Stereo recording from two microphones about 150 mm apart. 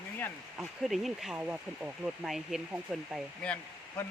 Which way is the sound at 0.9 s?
Centre (ahead or behind).